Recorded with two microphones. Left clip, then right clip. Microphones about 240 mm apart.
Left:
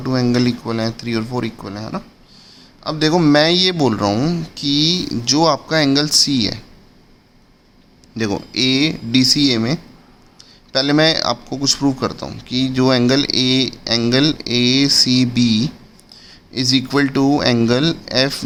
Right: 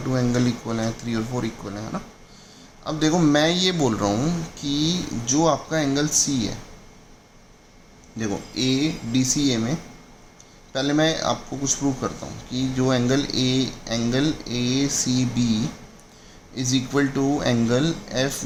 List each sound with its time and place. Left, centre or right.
0.1 s speech: left
8.1 s speech: left